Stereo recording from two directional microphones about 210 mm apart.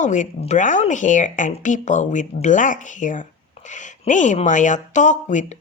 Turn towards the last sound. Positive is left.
turn(degrees=35)  # may be behind; listen again after turning